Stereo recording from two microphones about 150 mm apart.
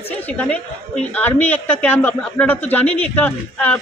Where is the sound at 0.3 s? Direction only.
10° left (ahead or behind).